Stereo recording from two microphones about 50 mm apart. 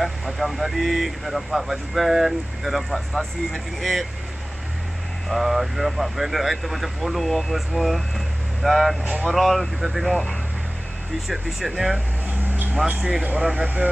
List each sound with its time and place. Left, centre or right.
0.0 s speech: centre
5.3 s speech: centre
11.1 s speech: centre
12.4 s a sound: right
13.0 s speech: centre